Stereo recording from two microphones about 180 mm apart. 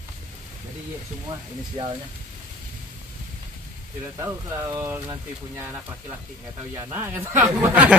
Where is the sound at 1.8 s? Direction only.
35° right (ahead or behind).